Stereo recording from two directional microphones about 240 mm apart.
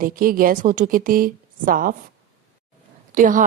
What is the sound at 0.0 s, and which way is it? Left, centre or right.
A woman's voice, right.